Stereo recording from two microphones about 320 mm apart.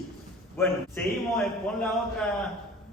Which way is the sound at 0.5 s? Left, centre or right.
Centre.